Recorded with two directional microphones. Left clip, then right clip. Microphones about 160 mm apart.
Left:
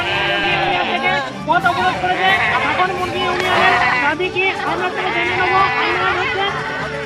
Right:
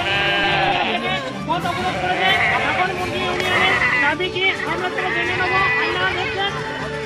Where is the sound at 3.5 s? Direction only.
40° left (ahead or behind).